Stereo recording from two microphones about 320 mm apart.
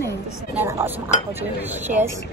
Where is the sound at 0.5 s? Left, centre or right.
Centre.